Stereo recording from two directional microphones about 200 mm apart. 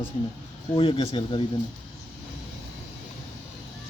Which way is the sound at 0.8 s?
25° left (ahead or behind).